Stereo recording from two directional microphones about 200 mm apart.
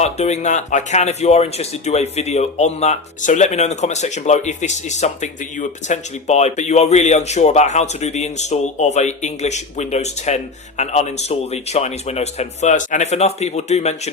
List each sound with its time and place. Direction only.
0.0 s speech: 35° left (ahead or behind)